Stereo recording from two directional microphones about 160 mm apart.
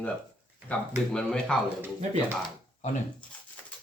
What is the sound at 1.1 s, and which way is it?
Speech, 5° left (ahead or behind).